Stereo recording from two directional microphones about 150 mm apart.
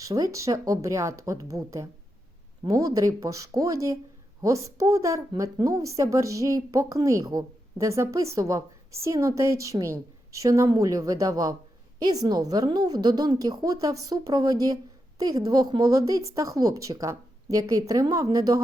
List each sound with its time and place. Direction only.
0.0 s speech: 20° right (ahead or behind)